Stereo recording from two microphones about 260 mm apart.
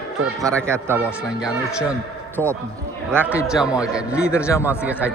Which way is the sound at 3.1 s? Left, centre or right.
Centre.